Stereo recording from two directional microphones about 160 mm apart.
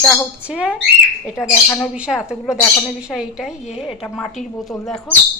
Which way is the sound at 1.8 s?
5° right (ahead or behind).